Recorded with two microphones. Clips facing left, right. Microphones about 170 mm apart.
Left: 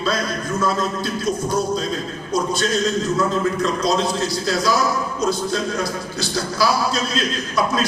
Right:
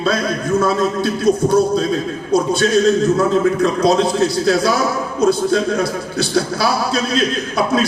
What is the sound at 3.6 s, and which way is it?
A man's voice, 60° right (ahead or behind).